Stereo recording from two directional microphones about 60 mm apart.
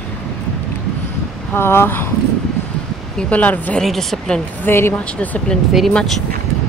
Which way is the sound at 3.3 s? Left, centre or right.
Left.